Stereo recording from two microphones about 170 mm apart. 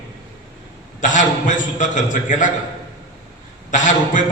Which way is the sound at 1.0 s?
50° left (ahead or behind).